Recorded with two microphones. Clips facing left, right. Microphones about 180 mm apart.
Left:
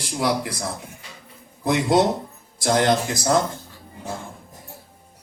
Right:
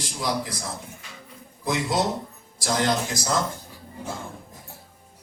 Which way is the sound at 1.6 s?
60° left (ahead or behind).